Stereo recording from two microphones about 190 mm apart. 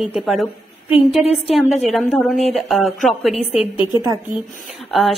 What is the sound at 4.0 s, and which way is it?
Speech, 15° right (ahead or behind).